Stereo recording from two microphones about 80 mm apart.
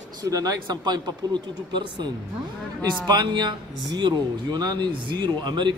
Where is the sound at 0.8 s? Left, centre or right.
Right.